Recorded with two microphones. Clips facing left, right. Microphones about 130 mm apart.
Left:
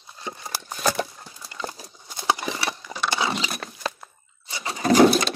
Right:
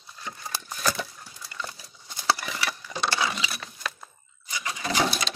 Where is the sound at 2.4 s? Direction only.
30° left (ahead or behind).